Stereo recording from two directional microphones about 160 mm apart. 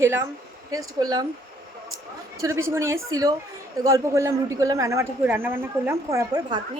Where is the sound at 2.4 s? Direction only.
15° right (ahead or behind).